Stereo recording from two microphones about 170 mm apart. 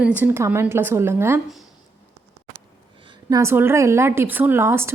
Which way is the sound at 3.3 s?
15° right (ahead or behind).